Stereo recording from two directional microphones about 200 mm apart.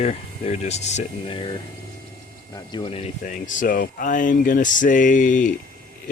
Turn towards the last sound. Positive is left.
turn(degrees=40)  # may be behind; listen again after turning